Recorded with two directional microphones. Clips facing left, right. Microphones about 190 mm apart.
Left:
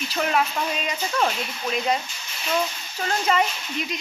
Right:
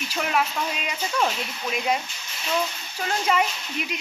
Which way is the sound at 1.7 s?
10° right (ahead or behind).